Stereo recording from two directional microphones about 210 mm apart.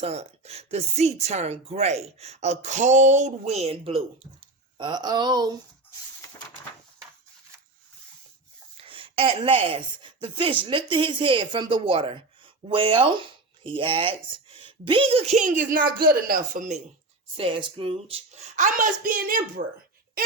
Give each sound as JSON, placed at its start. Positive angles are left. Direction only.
{"t": 0.0, "sound": "a woman's voice", "side_deg": -30}
{"t": 6.2, "sound": "a sound", "side_deg": 15}
{"t": 8.8, "sound": "a woman's voice", "side_deg": -25}